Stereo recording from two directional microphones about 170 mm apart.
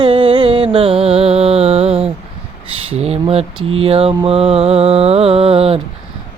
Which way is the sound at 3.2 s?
35° right (ahead or behind).